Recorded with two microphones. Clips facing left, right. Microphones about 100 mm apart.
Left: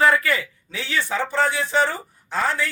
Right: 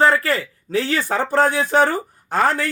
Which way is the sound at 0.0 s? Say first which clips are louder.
Right 2 dB; 35° right (ahead or behind).